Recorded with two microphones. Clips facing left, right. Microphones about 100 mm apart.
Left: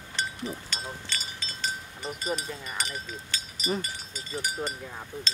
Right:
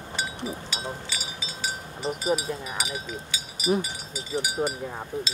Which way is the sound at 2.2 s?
5° right (ahead or behind).